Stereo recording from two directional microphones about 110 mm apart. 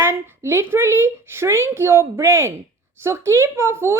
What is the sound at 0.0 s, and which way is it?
Speech, 20° right (ahead or behind).